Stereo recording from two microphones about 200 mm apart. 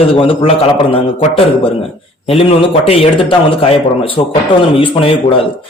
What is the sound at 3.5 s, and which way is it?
A man's voice, 25° left (ahead or behind).